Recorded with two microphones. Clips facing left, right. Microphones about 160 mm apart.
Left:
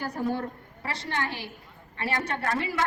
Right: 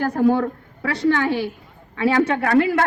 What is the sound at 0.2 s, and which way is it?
Speech, 80° right.